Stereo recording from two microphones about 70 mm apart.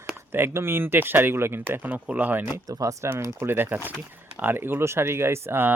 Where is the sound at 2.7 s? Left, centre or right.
Right.